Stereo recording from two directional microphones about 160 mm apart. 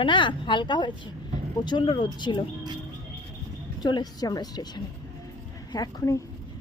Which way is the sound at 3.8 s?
25° left (ahead or behind).